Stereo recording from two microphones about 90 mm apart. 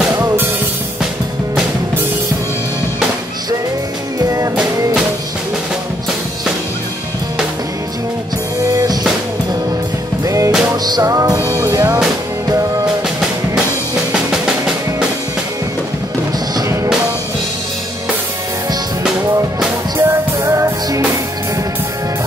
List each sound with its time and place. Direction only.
4.2 s music: 35° right (ahead or behind)
10.2 s music: 35° right (ahead or behind)
14.1 s music: 5° right (ahead or behind)
16.5 s music: 40° right (ahead or behind)
20.0 s music: 30° right (ahead or behind)